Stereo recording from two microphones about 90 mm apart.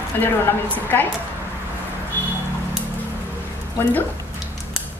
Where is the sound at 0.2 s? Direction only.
20° left (ahead or behind).